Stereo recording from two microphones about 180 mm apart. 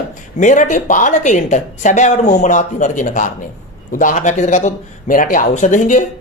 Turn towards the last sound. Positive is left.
turn(degrees=45)  # may be behind; listen again after turning